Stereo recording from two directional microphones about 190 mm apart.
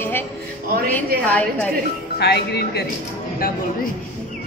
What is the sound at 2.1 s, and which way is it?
Speech, 60° left (ahead or behind).